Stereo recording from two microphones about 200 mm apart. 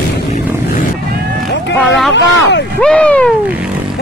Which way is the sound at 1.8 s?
Centre (ahead or behind).